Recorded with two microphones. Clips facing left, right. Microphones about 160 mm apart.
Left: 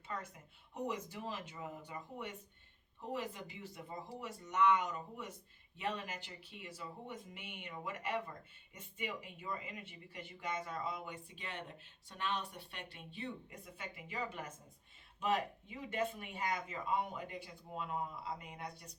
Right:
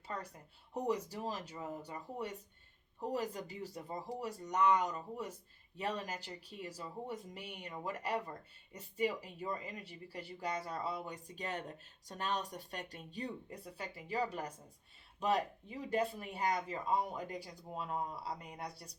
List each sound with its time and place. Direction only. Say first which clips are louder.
0.7 s speech: right 5 dB; 40° right (ahead or behind)